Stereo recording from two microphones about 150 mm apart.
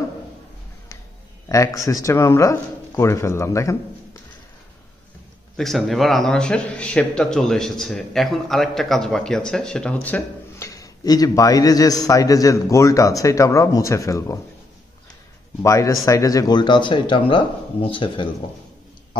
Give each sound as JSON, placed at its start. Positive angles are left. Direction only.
{"t": 1.5, "sound": "a man's voice", "side_deg": 20}
{"t": 5.6, "sound": "speech", "side_deg": 0}
{"t": 15.6, "sound": "speech", "side_deg": 20}